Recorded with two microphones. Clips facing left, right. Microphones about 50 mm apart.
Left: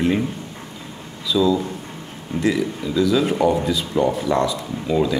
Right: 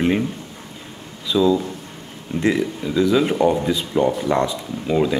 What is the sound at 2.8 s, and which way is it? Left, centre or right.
Speech, centre.